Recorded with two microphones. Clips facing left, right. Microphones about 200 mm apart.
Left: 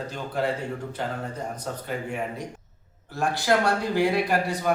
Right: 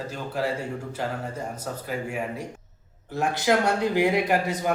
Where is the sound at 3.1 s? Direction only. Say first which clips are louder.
Right 1 dB; 20° right (ahead or behind).